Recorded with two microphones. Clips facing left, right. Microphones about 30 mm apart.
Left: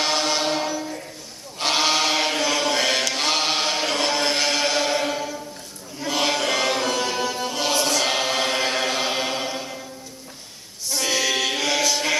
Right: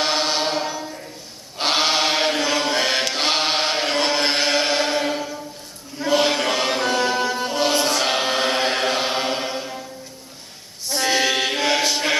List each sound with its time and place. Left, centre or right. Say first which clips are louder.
0.0 s chant: right 1 dB; right
5.9 s music: right 4 dB; right
10.9 s choir: right 3 dB; right